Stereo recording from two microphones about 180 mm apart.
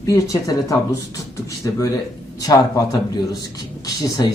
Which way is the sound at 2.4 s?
20° left (ahead or behind).